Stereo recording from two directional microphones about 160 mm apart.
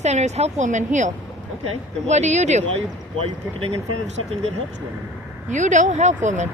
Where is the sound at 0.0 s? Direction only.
45° right (ahead or behind).